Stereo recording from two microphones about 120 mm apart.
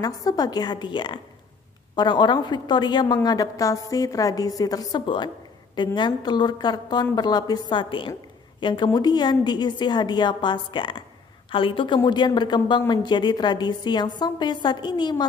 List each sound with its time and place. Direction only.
0.0 s a woman's voice: 30° left (ahead or behind)
5.0 s a woman's voice: 40° left (ahead or behind)